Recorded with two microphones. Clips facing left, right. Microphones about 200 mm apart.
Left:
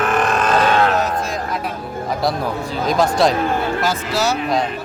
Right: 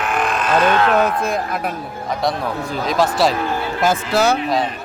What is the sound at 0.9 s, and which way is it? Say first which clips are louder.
Speech: right 3 dB; 55° right (ahead or behind).